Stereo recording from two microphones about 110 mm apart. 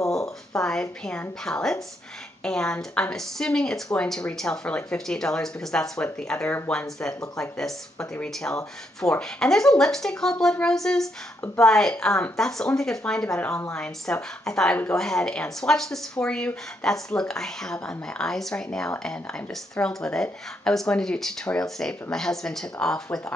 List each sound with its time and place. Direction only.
0.6 s speech: 5° left (ahead or behind)